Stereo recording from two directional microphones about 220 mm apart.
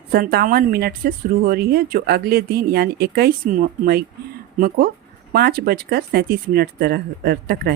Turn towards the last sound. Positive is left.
turn(degrees=-45)  # may be behind; listen again after turning